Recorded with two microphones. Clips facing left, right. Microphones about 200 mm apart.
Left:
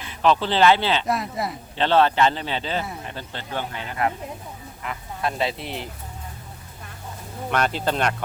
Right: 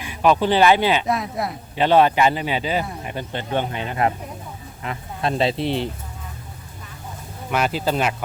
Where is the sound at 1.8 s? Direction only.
15° right (ahead or behind).